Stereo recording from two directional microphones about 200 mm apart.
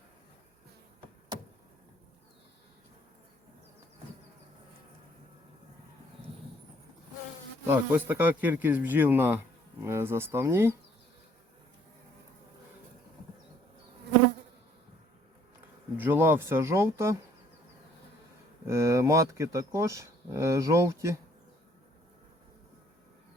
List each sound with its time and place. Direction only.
7.7 s speech: 10° right (ahead or behind)
16.0 s speech: 10° right (ahead or behind)
18.7 s speech: 15° right (ahead or behind)